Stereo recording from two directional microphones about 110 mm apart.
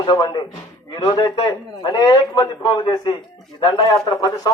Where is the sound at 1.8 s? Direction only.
35° left (ahead or behind).